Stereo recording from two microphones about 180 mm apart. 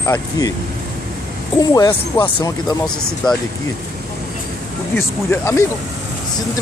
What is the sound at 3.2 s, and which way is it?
Speech, 25° left (ahead or behind).